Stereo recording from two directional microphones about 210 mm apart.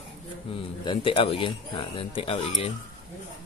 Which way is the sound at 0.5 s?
25° left (ahead or behind).